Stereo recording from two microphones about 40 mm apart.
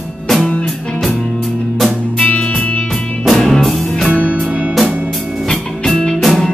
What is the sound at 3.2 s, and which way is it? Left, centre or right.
Music, centre.